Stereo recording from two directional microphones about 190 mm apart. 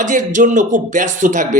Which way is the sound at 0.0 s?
40° right (ahead or behind).